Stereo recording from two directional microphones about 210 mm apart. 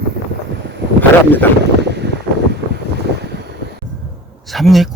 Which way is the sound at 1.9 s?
55° right (ahead or behind).